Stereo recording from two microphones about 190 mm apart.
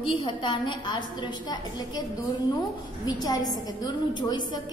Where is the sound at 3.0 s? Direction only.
20° left (ahead or behind).